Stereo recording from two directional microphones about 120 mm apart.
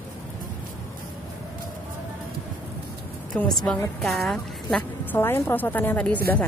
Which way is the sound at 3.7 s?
10° left (ahead or behind).